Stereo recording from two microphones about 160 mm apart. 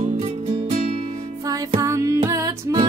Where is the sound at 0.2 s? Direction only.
40° right (ahead or behind).